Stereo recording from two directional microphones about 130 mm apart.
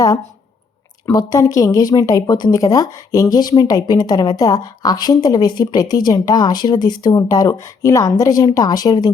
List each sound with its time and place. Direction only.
1.1 s speech: 25° left (ahead or behind)